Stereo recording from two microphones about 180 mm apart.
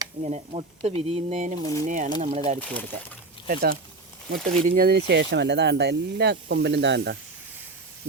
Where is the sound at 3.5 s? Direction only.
55° right (ahead or behind).